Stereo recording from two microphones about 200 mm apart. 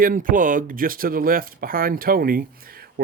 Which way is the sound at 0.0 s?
45° right (ahead or behind).